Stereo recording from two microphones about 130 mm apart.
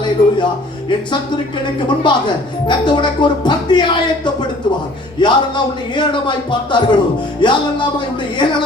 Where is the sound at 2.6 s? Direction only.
35° left (ahead or behind).